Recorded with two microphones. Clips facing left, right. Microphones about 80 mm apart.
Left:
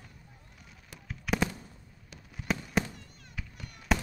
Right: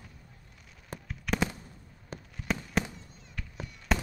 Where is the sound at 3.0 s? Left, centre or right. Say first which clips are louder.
Right 1 dB; left.